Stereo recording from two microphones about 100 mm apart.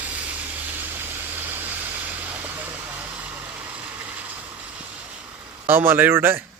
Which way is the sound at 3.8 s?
15° right (ahead or behind).